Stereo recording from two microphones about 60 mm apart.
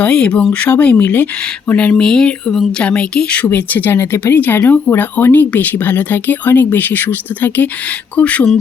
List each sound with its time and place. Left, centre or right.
0.0 s speech: left
3.9 s speech: left
4.4 s speech: left